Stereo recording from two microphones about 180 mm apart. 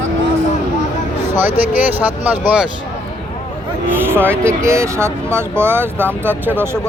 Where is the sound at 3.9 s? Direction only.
10° right (ahead or behind).